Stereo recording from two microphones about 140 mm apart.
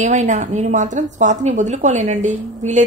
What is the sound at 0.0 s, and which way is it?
A woman's voice, 60° right (ahead or behind).